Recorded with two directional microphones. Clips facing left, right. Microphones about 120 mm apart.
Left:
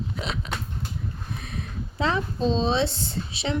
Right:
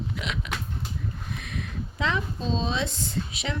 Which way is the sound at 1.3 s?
35° left (ahead or behind).